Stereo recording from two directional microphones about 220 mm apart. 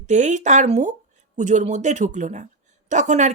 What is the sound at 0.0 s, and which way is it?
A woman's voice, 35° right (ahead or behind).